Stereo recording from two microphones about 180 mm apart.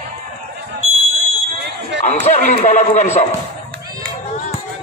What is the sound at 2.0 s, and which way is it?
A man's voice, 40° left (ahead or behind).